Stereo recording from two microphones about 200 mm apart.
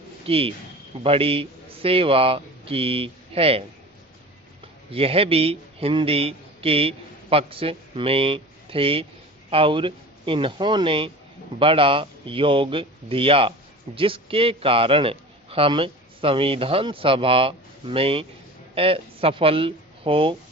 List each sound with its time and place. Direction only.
0.3 s a man's voice: 30° right (ahead or behind)
4.9 s a man's voice: 30° right (ahead or behind)